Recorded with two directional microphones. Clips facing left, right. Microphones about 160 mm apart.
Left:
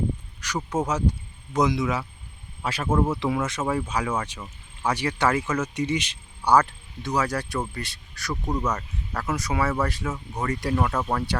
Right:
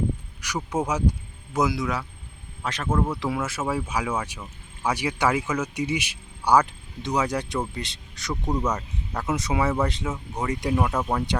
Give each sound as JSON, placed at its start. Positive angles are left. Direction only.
{"t": 0.4, "sound": "speech", "side_deg": -10}